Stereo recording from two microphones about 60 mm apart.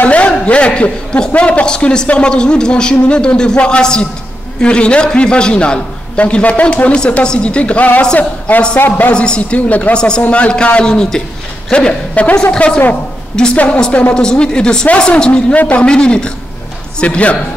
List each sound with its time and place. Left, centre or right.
0.0 s a man's voice: left
8.7 s speech: left
9.1 s a man's voice: centre
9.7 s a man's voice: left
9.9 s a man's voice: centre
15.5 s a man's voice: left